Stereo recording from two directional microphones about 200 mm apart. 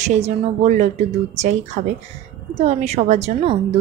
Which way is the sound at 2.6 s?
30° right (ahead or behind).